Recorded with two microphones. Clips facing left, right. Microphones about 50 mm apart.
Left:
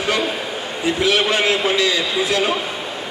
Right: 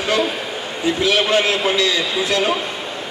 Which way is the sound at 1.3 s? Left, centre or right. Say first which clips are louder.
Right 1 dB; centre.